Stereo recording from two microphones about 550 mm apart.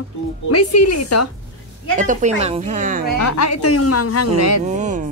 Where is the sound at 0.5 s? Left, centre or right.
Left.